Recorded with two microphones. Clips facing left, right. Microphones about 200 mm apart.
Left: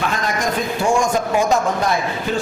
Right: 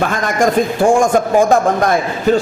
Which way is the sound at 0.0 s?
50° right (ahead or behind).